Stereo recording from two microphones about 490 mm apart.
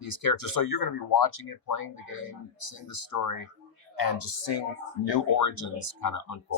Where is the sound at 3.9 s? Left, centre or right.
Left.